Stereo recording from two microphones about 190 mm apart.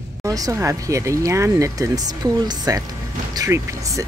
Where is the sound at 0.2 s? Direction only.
15° right (ahead or behind).